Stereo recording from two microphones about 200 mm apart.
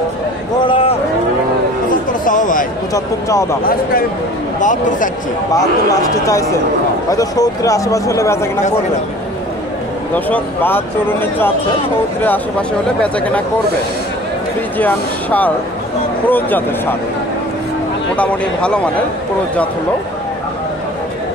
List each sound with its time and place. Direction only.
0.7 s a sound: 30° left (ahead or behind)
2.2 s a sound: 40° left (ahead or behind)
2.9 s speech: 15° left (ahead or behind)
4.6 s speech: 40° left (ahead or behind)
7.1 s speech: 15° left (ahead or behind)
10.1 s speech: 10° left (ahead or behind)
14.8 s speech: 10° left (ahead or behind)
18.1 s speech: 5° left (ahead or behind)